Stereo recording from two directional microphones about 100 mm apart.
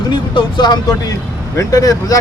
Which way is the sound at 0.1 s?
50° left (ahead or behind).